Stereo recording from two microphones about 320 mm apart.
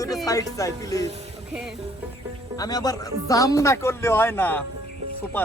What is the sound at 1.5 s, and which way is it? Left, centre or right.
Speech, centre.